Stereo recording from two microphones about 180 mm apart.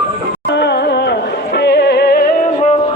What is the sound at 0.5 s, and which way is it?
Music, 70° left (ahead or behind).